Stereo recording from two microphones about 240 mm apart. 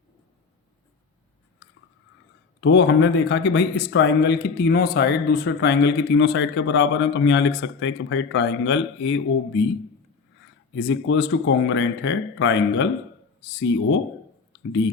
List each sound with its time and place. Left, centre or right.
2.6 s speech: left
10.8 s speech: left